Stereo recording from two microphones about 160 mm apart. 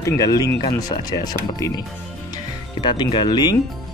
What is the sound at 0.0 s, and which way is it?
Speech, 20° left (ahead or behind).